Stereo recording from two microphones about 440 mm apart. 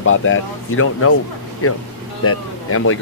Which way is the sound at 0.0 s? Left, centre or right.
Left.